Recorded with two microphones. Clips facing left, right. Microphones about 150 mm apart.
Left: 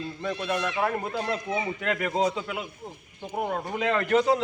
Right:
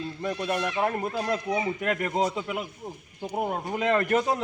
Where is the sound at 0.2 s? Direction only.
15° right (ahead or behind).